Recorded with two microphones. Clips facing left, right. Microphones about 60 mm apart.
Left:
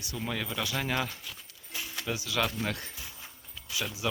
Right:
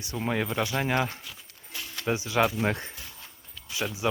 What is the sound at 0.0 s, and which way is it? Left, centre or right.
Speech, right.